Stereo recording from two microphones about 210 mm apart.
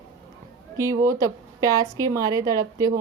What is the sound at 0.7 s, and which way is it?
A woman's voice, 15° right (ahead or behind).